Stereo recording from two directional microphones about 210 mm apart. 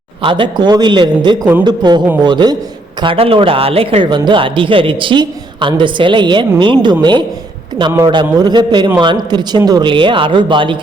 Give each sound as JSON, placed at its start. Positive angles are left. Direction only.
{"t": 0.2, "sound": "speech", "side_deg": -25}